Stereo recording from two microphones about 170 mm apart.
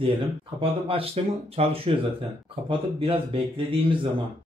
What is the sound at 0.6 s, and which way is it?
Speech, 35° right (ahead or behind).